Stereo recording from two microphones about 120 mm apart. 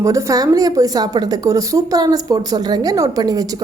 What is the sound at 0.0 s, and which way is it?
A woman's voice, 25° right (ahead or behind).